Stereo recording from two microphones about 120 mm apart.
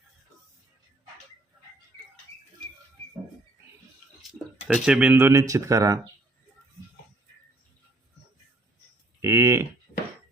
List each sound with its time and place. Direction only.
4.7 s speech: 10° right (ahead or behind)
5.1 s speech: 20° right (ahead or behind)
9.2 s a sound: 25° right (ahead or behind)